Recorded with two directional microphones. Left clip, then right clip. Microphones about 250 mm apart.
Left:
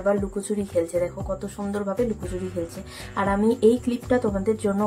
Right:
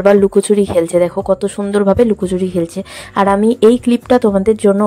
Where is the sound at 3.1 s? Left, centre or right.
Right.